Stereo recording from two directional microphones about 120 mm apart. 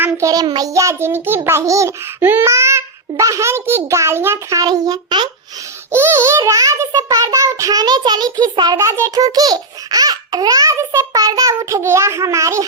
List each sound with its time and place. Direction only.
0.0 s child singing: 25° right (ahead or behind)
5.9 s child singing: 20° right (ahead or behind)